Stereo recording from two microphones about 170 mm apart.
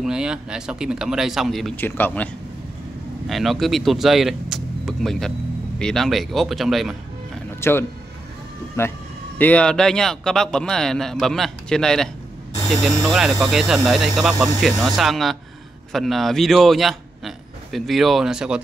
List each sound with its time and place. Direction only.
0.0 s a man's voice: 5° right (ahead or behind)
1.8 s a man's voice: 10° left (ahead or behind)
3.3 s a man's voice: centre (ahead or behind)
7.6 s a man's voice: 15° left (ahead or behind); by 18.6 s 5° right (ahead or behind)